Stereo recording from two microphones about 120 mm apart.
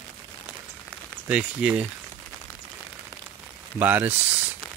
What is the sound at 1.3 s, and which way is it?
Speech, 10° right (ahead or behind).